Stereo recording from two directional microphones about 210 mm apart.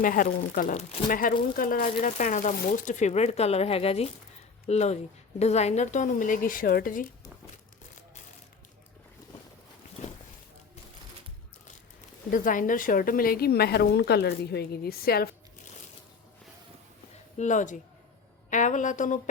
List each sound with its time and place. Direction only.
0.0 s speech: 40° left (ahead or behind)
12.3 s a woman's voice: 40° left (ahead or behind)
17.3 s speech: 35° left (ahead or behind)